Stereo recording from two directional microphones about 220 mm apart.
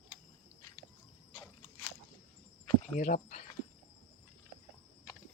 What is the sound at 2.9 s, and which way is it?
Speech, 35° left (ahead or behind).